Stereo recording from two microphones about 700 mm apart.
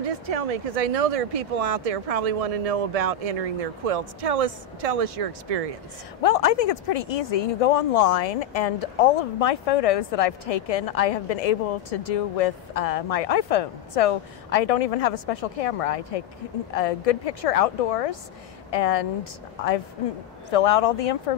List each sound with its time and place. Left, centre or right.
0.0 s speech: right
6.2 s speech: left
20.4 s speech: left